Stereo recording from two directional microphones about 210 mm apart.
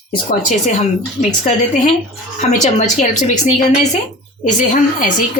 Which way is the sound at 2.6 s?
35° left (ahead or behind).